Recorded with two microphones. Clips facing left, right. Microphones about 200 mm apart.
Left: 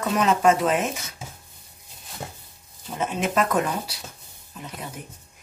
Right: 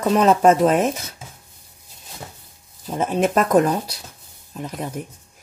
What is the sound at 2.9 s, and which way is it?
A woman's voice, 40° right (ahead or behind).